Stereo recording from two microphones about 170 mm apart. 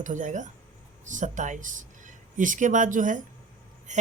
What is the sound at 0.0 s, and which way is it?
Speech, 45° right (ahead or behind).